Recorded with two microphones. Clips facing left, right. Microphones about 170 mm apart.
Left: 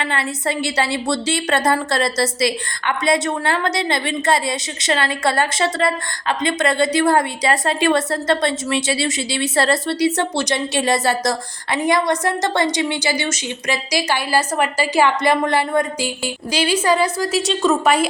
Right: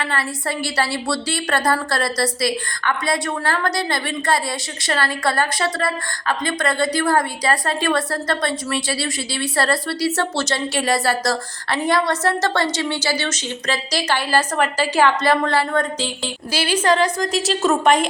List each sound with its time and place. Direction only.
0.0 s a woman's voice: 20° left (ahead or behind); by 18.0 s centre (ahead or behind)